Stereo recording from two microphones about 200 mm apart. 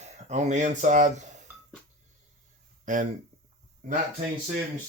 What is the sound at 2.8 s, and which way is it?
Speech, 40° right (ahead or behind).